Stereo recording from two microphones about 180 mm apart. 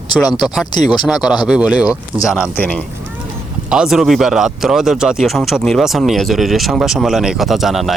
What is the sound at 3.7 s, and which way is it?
Speech, 5° right (ahead or behind).